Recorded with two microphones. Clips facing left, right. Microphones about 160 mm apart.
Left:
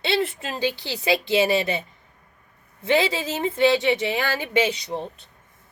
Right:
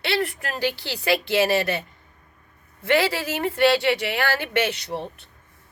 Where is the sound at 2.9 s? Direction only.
70° right (ahead or behind).